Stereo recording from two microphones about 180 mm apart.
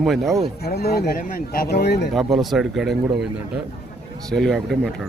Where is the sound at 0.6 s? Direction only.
60° left (ahead or behind).